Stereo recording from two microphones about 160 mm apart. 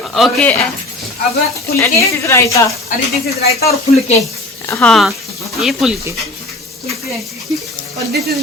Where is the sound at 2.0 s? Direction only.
20° left (ahead or behind).